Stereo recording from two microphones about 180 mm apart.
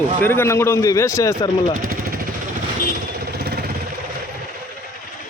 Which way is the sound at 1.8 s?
55° right (ahead or behind).